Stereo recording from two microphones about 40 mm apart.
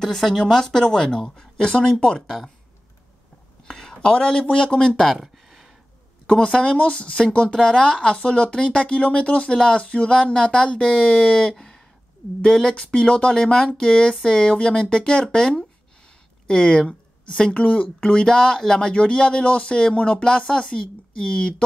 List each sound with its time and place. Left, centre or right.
0.0 s speech: centre; by 2.1 s left
2.2 s speech: centre
3.6 s speech: centre
5.1 s a sound: centre
6.2 s speech: left
11.3 s a sound: centre
12.4 s a woman's voice: centre